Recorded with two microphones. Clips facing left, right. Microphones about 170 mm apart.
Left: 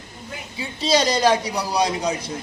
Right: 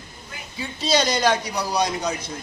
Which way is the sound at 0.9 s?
35° left (ahead or behind).